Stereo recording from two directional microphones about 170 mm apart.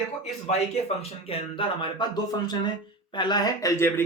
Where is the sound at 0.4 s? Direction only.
40° left (ahead or behind).